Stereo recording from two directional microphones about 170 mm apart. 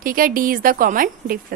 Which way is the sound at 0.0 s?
55° right (ahead or behind).